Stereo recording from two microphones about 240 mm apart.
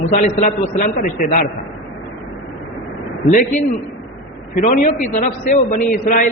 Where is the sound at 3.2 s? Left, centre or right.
Left.